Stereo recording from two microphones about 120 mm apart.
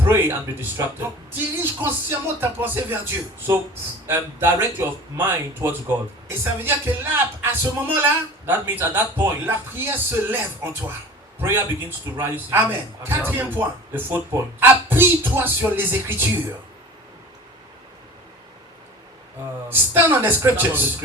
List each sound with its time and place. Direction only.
0.0 s a man's voice: 20° right (ahead or behind)
19.6 s a man's voice: 15° right (ahead or behind)